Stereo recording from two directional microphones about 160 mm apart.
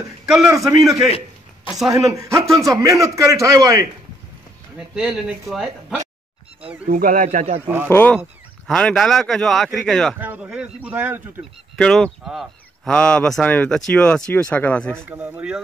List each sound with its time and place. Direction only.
0.3 s speech: centre (ahead or behind)
2.0 s a man's voice: 20° right (ahead or behind)
4.7 s speech: 5° right (ahead or behind)
6.9 s speech: 60° right (ahead or behind); by 7.6 s 45° right (ahead or behind)
7.6 s speech: 15° right (ahead or behind)
7.9 s speech: 10° left (ahead or behind)
10.1 s speech: 10° right (ahead or behind)
11.7 s speech: 5° left (ahead or behind)
15.0 s speech: 10° right (ahead or behind)